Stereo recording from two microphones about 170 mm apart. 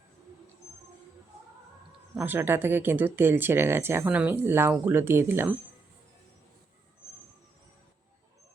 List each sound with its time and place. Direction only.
2.1 s speech: 10° right (ahead or behind)